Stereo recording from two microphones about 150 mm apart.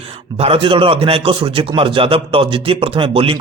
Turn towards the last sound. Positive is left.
turn(degrees=-35)  # may be behind; listen again after turning